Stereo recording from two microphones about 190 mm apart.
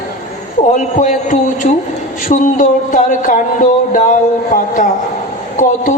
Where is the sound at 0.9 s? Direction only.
45° left (ahead or behind).